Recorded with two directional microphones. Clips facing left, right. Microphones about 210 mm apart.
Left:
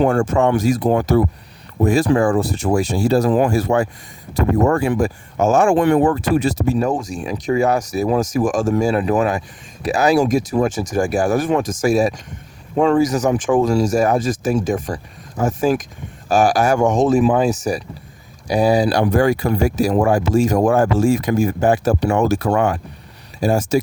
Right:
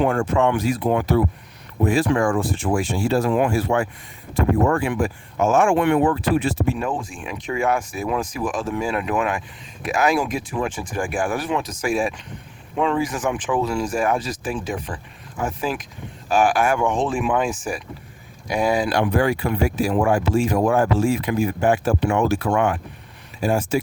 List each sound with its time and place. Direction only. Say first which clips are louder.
0.0 s speech: left 3 dB; 45° left (ahead or behind)